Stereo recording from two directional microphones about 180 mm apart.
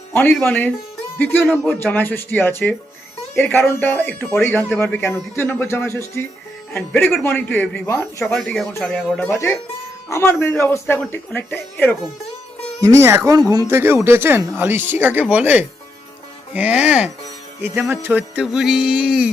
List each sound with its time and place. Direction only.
0.1 s a man's voice: 10° left (ahead or behind)
8.2 s music: 5° left (ahead or behind)
8.7 s a man's voice: 10° left (ahead or behind)
12.8 s speech: 15° right (ahead or behind)
17.6 s music: 10° right (ahead or behind)